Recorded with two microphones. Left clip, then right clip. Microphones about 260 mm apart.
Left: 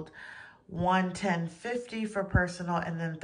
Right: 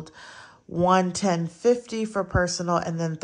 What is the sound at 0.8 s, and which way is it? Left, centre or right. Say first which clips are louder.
A woman's voice: right 7 dB; centre.